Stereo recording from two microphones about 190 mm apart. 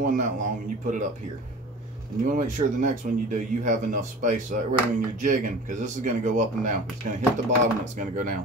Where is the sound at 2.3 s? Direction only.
40° right (ahead or behind).